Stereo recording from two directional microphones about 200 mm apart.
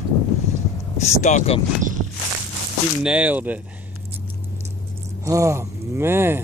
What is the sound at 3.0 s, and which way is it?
Speech, 5° right (ahead or behind).